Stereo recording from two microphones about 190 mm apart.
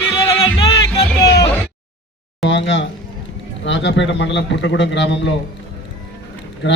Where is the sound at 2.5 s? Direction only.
70° left (ahead or behind).